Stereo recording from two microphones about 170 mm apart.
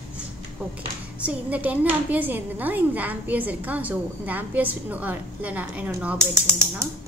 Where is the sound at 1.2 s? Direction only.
10° right (ahead or behind).